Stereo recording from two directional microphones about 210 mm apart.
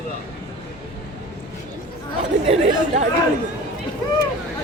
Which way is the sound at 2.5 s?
30° right (ahead or behind).